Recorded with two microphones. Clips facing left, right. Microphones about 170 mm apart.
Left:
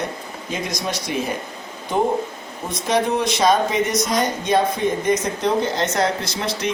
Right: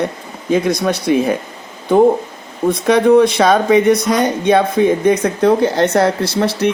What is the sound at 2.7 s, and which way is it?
Speech, 60° right (ahead or behind).